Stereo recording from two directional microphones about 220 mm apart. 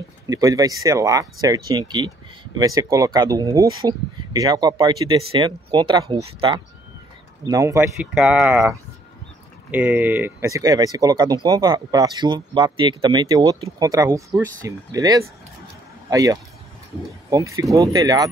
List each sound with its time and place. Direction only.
0.3 s speech: 15° right (ahead or behind)
9.7 s speech: 5° right (ahead or behind)